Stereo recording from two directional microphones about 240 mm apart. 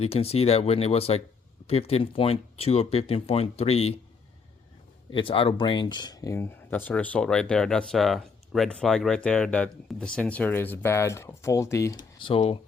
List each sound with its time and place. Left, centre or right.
0.0 s speech: left
5.1 s speech: left
12.2 s speech: left